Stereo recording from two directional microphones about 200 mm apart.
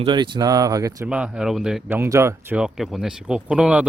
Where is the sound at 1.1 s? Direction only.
5° right (ahead or behind).